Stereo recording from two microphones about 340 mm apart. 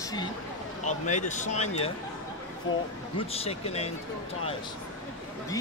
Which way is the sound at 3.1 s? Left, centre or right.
Centre.